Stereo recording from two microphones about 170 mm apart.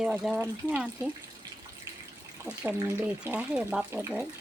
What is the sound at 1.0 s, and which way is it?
Speech, 20° right (ahead or behind).